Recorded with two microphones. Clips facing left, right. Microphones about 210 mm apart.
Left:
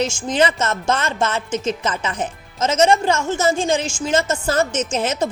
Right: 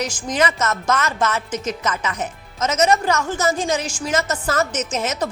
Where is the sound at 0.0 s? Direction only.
25° left (ahead or behind).